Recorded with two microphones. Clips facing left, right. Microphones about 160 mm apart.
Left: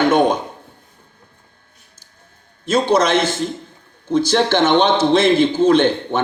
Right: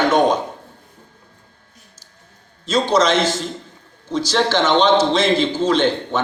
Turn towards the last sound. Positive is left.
turn(degrees=55)  # may be behind; listen again after turning